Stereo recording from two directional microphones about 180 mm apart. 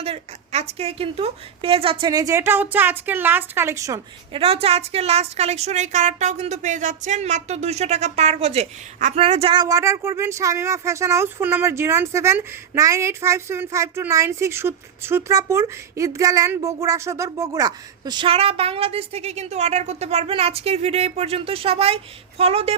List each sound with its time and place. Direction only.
0.0 s a woman's voice: 35° right (ahead or behind); by 4.0 s 15° right (ahead or behind)
4.3 s a woman's voice: 30° right (ahead or behind)